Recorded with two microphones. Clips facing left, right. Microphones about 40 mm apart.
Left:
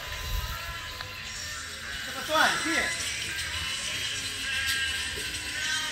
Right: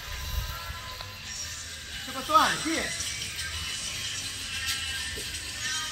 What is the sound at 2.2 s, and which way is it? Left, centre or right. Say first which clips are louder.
Music: right 2 dB; centre.